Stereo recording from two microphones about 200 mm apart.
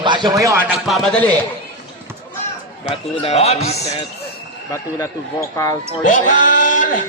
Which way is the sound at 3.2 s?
30° left (ahead or behind).